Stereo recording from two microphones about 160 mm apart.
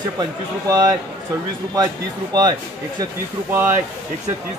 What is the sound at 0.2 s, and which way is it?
Speech, 20° right (ahead or behind).